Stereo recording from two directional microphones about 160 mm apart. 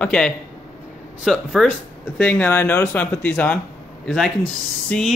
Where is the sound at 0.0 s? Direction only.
5° left (ahead or behind).